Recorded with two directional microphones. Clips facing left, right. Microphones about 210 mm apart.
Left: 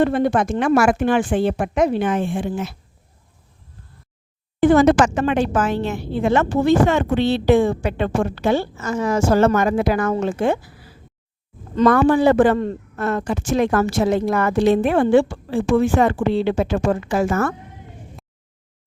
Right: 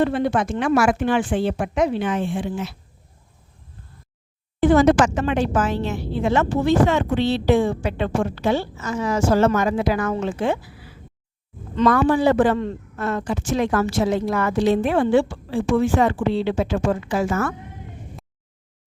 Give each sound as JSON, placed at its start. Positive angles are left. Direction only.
{"t": 0.0, "sound": "speech", "side_deg": 45}
{"t": 4.6, "sound": "speech", "side_deg": 55}